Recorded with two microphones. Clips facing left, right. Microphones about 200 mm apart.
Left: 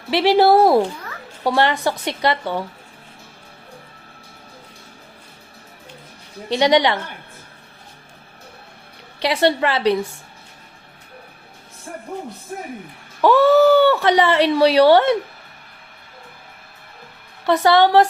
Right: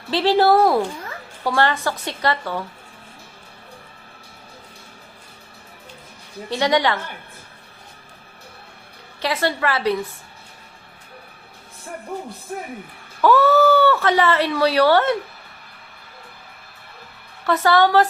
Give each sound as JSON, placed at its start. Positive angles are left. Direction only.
{"t": 0.1, "sound": "speech", "side_deg": 15}
{"t": 0.5, "sound": "a woman's voice", "side_deg": 30}
{"t": 6.5, "sound": "speech", "side_deg": 15}
{"t": 9.2, "sound": "speech", "side_deg": 20}
{"t": 13.2, "sound": "a woman's voice", "side_deg": 20}
{"t": 17.4, "sound": "a woman's voice", "side_deg": 15}